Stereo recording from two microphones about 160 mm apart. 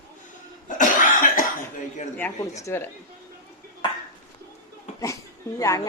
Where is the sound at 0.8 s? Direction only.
55° left (ahead or behind).